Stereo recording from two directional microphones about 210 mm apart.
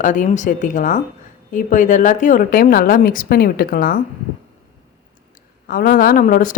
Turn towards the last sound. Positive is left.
turn(degrees=40)  # may be behind; listen again after turning